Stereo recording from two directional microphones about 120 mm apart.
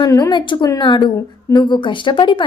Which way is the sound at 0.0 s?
35° left (ahead or behind).